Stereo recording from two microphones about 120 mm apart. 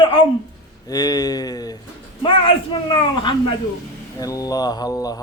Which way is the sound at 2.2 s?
45° left (ahead or behind).